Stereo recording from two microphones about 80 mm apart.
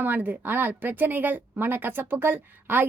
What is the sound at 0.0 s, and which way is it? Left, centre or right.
Speech, right.